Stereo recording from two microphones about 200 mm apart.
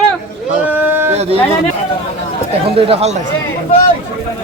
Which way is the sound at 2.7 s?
30° right (ahead or behind).